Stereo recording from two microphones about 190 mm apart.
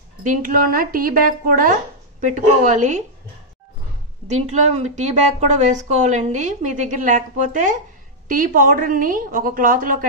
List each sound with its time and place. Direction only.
0.2 s speech: 45° right (ahead or behind)
4.3 s a woman's voice: 35° right (ahead or behind)